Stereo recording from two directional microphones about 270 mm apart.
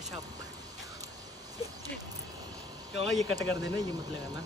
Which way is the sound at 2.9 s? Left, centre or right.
Left.